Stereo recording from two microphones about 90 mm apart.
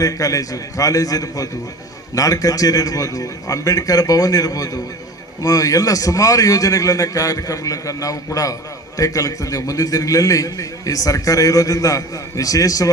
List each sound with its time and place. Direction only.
0.0 s a man's voice: 40° left (ahead or behind)